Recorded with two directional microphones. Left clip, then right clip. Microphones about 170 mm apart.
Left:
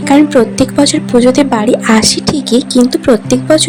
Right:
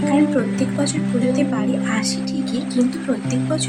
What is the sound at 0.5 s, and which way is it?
A woman's voice, 40° left (ahead or behind).